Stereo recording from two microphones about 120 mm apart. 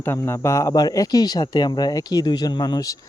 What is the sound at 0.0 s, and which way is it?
Speech, 20° left (ahead or behind).